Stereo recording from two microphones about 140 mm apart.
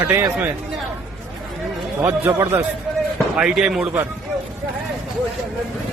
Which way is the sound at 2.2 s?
15° right (ahead or behind).